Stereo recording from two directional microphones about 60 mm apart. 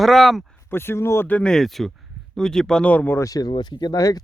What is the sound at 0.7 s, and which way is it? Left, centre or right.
Speech, left.